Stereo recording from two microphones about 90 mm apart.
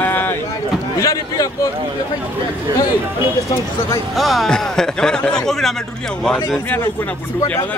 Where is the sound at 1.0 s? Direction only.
35° left (ahead or behind).